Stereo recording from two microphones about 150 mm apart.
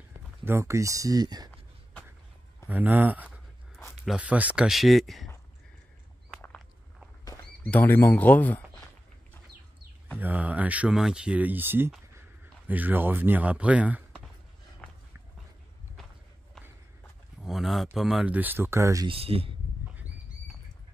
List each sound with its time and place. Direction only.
0.5 s speech: 20° right (ahead or behind)
2.7 s speech: 10° right (ahead or behind)
7.6 s speech: 10° left (ahead or behind)
10.1 s speech: 10° right (ahead or behind)
17.4 s a sound: centre (ahead or behind)
17.9 s speech: 5° right (ahead or behind); by 19.0 s 20° right (ahead or behind)
19.0 s speech: 40° right (ahead or behind)